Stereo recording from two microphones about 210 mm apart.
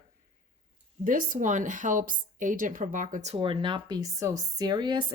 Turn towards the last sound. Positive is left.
turn(degrees=-20)  # may be behind; listen again after turning